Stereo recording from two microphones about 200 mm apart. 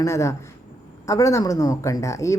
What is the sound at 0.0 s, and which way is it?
Speech, 15° left (ahead or behind).